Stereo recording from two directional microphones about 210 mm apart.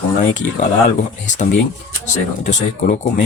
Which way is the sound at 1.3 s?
35° left (ahead or behind).